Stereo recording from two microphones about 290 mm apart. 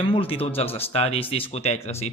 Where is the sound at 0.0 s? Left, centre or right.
Centre.